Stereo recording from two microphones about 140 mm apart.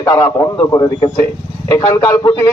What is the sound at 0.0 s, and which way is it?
Speech, 25° left (ahead or behind).